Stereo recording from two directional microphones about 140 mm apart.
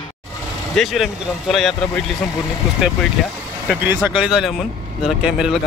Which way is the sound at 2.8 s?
5° right (ahead or behind).